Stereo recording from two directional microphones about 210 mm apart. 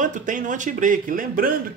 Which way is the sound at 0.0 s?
40° right (ahead or behind).